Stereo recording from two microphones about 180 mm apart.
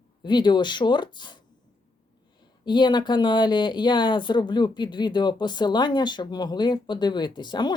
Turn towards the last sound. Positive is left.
turn(degrees=25)  # may be behind; listen again after turning